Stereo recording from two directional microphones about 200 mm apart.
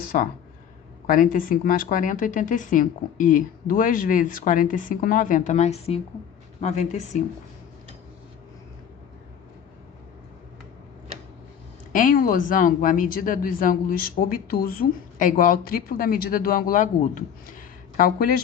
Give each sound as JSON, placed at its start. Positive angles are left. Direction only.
{"t": 0.1, "sound": "speech", "side_deg": 45}
{"t": 11.9, "sound": "speech", "side_deg": 40}